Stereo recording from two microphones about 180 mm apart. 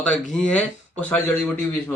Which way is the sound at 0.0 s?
5° left (ahead or behind).